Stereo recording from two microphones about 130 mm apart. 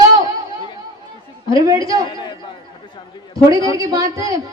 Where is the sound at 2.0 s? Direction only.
35° left (ahead or behind).